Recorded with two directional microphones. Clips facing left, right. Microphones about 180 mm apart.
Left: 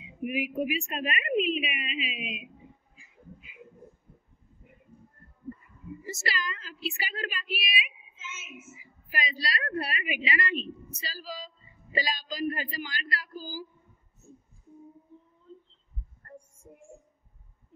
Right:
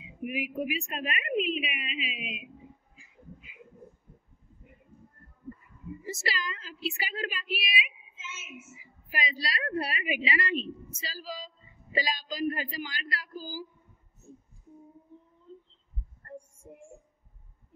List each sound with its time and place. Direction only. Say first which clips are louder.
0.2 s a woman's voice: left 3 dB; centre (ahead or behind)
6.0 s a man's voice: even; 30° right (ahead or behind)
9.1 s a man's voice: left 1 dB; 20° right (ahead or behind)
11.0 s a man's voice: even; 20° right (ahead or behind)